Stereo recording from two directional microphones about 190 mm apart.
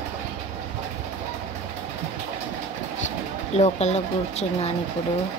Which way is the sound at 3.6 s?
35° left (ahead or behind).